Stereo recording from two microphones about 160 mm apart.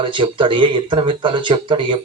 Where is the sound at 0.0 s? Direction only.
30° right (ahead or behind).